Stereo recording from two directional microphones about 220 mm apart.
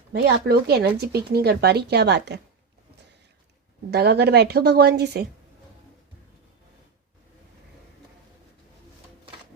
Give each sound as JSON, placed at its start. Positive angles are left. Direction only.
{"t": 0.1, "sound": "speech", "side_deg": -45}
{"t": 3.9, "sound": "speech", "side_deg": -50}